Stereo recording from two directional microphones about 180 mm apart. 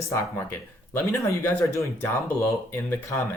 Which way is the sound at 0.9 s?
15° left (ahead or behind).